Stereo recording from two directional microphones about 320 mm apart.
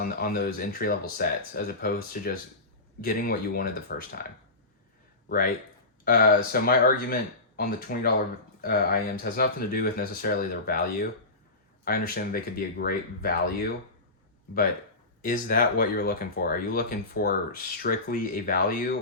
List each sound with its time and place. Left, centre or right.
0.0 s speech: left
6.1 s speech: left
11.9 s speech: left
15.2 s speech: left